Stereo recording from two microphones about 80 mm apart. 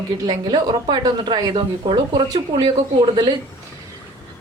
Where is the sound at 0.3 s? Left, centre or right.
Right.